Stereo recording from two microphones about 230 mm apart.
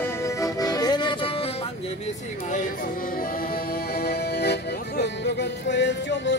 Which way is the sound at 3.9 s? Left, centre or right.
Left.